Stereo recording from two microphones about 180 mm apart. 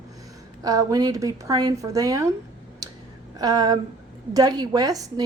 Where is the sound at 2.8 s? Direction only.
20° right (ahead or behind).